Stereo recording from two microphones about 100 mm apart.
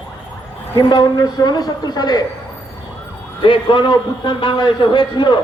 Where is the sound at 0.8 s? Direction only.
50° left (ahead or behind).